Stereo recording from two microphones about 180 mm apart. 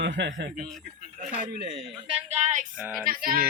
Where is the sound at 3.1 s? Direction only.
50° right (ahead or behind).